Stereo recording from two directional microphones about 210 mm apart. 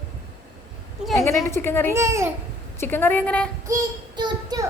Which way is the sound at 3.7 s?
20° right (ahead or behind).